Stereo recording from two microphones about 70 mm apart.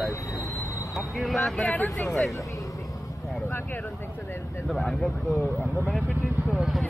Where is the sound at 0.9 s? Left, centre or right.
Centre.